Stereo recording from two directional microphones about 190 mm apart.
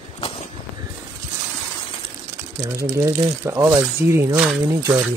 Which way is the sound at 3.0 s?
15° right (ahead or behind).